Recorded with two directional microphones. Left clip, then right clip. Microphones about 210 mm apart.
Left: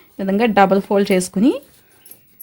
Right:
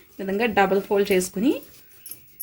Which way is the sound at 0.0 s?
50° left (ahead or behind).